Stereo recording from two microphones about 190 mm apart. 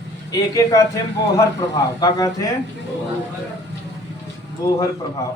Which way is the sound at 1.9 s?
20° left (ahead or behind).